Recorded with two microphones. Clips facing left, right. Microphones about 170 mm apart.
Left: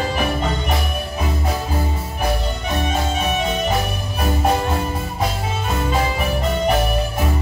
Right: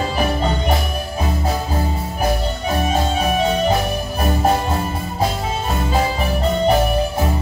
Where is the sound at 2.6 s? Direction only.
35° right (ahead or behind).